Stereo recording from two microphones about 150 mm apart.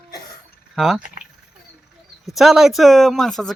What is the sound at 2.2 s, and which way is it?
Speech, centre (ahead or behind).